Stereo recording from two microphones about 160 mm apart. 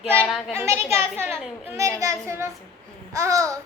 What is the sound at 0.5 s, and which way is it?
A child's voice, 15° right (ahead or behind).